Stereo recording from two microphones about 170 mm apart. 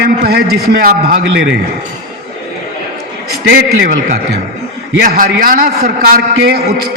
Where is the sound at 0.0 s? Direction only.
65° right (ahead or behind).